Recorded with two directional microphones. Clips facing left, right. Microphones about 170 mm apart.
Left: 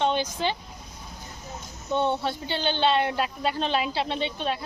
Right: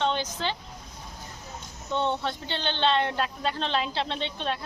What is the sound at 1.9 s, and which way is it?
A woman's voice, 10° left (ahead or behind).